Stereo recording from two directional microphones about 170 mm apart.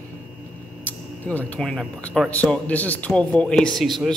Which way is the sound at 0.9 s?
10° left (ahead or behind).